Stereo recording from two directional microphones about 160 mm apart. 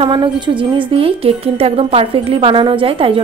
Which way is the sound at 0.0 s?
30° right (ahead or behind).